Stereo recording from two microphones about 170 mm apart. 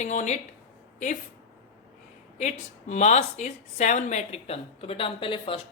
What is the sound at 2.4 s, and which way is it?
Speech, 45° left (ahead or behind).